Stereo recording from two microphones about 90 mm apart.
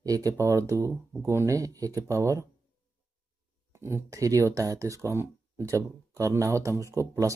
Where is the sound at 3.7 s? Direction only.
30° right (ahead or behind).